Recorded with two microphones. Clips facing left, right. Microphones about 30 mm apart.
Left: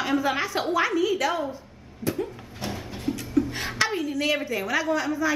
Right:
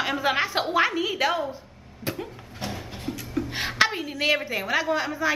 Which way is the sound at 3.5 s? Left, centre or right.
Right.